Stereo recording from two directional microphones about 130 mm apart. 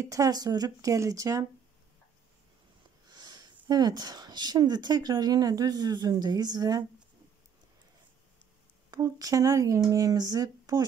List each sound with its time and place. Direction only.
0.0 s speech: 25° right (ahead or behind)
3.1 s speech: 35° right (ahead or behind)
8.9 s speech: 25° right (ahead or behind)